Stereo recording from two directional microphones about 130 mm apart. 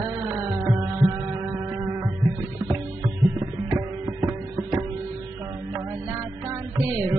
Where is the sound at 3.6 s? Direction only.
20° right (ahead or behind).